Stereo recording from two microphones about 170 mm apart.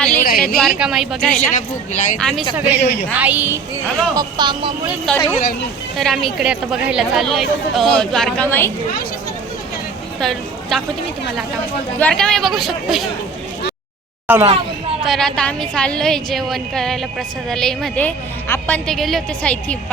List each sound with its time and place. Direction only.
0.1 s a sound: 50° left (ahead or behind)
0.3 s a woman's voice: centre (ahead or behind)
1.5 s speech: 45° left (ahead or behind)
2.1 s a woman's voice: 5° left (ahead or behind)
2.6 s a woman's voice: 10° right (ahead or behind)
2.8 s a woman's voice: 65° left (ahead or behind)
3.1 s a woman's voice: 10° right (ahead or behind)
4.2 s speech: 25° right (ahead or behind)
5.1 s a woman's voice: 5° left (ahead or behind)
10.2 s a woman's voice: centre (ahead or behind)
11.9 s a woman's voice: 5° left (ahead or behind)
14.3 s a woman's voice: 10° right (ahead or behind)
15.0 s a woman's voice: centre (ahead or behind)
18.9 s a woman's voice: centre (ahead or behind)